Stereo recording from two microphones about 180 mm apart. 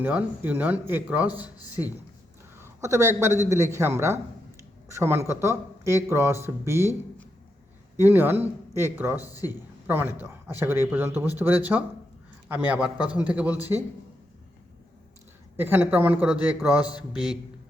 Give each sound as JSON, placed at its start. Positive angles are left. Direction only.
{"t": 0.0, "sound": "a man's voice", "side_deg": -10}
{"t": 2.6, "sound": "a man's voice", "side_deg": -15}
{"t": 7.9, "sound": "a man's voice", "side_deg": -15}
{"t": 9.2, "sound": "a man's voice", "side_deg": 20}
{"t": 9.5, "sound": "a man's voice", "side_deg": -10}
{"t": 15.5, "sound": "a man's voice", "side_deg": -10}